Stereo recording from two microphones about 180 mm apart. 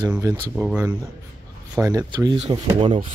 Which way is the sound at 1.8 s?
20° right (ahead or behind).